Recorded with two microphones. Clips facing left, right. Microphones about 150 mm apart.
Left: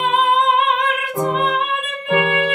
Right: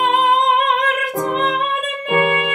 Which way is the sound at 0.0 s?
40° right (ahead or behind).